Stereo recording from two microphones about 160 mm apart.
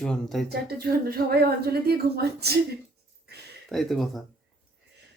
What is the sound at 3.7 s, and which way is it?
Speech, centre (ahead or behind).